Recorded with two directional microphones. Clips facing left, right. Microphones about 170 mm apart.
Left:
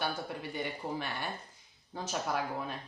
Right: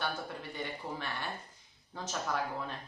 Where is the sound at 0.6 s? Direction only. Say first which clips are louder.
Left 3 dB; 15° left (ahead or behind).